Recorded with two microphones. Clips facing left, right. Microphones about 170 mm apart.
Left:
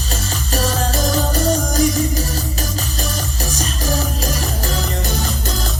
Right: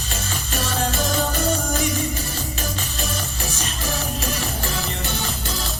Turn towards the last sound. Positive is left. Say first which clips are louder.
# left 5 dB
turn(degrees=40)  # may be behind; listen again after turning